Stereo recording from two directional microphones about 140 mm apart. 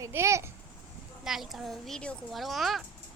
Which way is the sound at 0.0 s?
20° right (ahead or behind).